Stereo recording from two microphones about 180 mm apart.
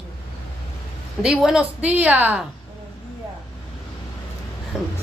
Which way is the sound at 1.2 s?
5° right (ahead or behind).